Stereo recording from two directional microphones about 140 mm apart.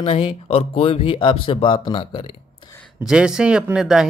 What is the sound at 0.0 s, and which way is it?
Speech, 40° left (ahead or behind).